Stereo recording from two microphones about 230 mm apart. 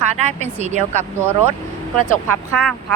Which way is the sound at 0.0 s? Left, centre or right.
Right.